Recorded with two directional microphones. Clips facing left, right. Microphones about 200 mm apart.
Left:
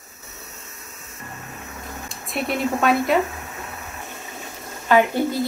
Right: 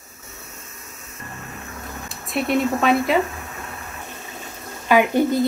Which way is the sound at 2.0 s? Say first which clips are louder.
Right 3 dB; centre (ahead or behind).